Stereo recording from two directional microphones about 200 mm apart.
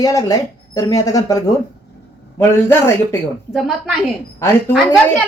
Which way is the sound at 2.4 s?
10° left (ahead or behind).